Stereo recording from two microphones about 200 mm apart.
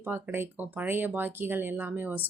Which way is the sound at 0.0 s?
10° right (ahead or behind).